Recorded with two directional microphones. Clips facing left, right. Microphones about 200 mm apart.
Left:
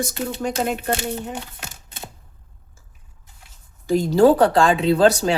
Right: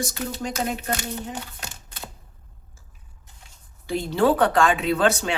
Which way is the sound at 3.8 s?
40° left (ahead or behind).